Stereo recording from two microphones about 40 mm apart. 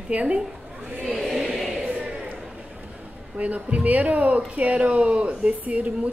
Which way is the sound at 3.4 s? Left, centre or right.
Right.